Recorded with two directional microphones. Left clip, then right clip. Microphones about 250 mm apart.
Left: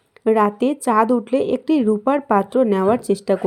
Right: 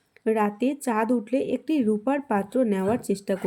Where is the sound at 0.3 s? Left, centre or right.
Centre.